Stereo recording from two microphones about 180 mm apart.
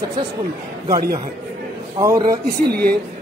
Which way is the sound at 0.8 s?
25° right (ahead or behind).